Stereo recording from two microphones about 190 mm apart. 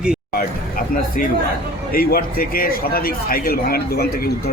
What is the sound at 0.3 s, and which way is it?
A man's voice, 45° left (ahead or behind).